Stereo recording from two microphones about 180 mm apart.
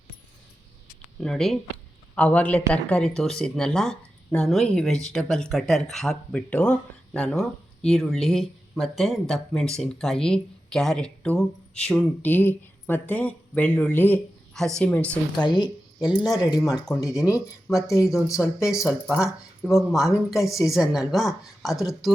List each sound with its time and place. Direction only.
1.2 s speech: 5° left (ahead or behind)
15.4 s speech: 25° left (ahead or behind)
16.7 s speech: centre (ahead or behind)
17.7 s speech: 15° left (ahead or behind)
18.3 s speech: 5° right (ahead or behind)
20.4 s speech: 20° left (ahead or behind)
20.7 s speech: centre (ahead or behind)